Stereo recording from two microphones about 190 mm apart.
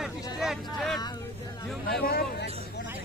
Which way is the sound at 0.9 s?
20° left (ahead or behind).